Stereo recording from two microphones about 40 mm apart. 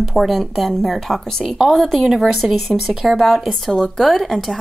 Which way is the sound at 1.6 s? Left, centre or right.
Centre.